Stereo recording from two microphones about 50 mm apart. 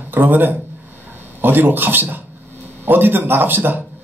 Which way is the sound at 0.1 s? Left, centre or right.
Right.